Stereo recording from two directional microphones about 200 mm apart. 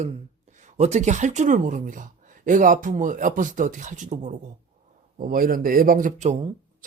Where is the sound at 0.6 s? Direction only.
35° right (ahead or behind).